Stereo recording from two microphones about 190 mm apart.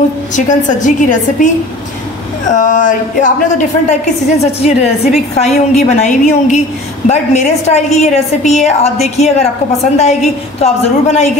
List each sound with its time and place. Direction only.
0.5 s a woman's voice: 40° left (ahead or behind)
2.5 s a sound: 40° left (ahead or behind)
4.4 s a woman's voice: 35° left (ahead or behind)